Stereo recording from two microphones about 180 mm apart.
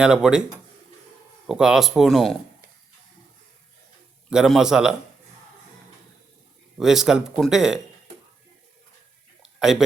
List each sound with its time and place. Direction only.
0.0 s speech: 5° right (ahead or behind)
1.5 s speech: 5° right (ahead or behind)
4.3 s speech: 5° right (ahead or behind)
6.7 s speech: centre (ahead or behind)
9.4 s a sound: 5° right (ahead or behind)